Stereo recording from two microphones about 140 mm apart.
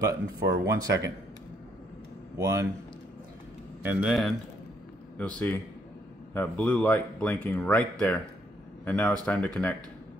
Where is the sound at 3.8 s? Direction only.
10° right (ahead or behind).